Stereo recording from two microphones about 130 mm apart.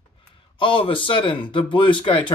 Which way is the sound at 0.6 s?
40° left (ahead or behind).